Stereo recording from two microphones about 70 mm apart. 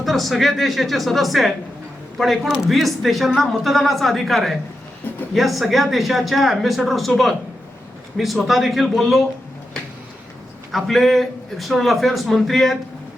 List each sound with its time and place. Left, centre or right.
0.0 s speech: centre
10.7 s speech: centre